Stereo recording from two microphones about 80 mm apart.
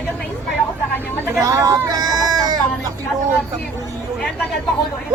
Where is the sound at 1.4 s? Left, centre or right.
Right.